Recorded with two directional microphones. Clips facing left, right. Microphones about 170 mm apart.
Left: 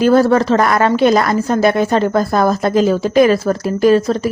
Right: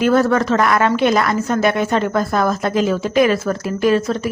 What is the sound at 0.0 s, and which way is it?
A woman's voice, 35° left (ahead or behind).